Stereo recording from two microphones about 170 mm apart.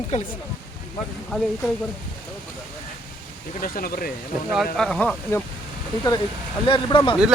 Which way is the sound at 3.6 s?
60° left (ahead or behind).